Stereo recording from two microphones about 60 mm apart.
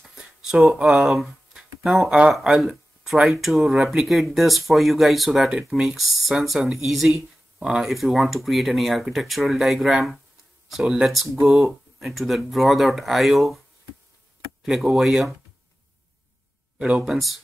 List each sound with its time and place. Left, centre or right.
0.1 s a sound: centre
0.8 s speech: centre
14.6 s speech: centre
16.7 s speech: right
17.0 s speech: centre